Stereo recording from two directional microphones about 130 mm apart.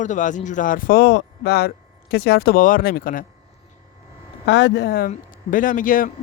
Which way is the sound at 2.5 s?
90° left.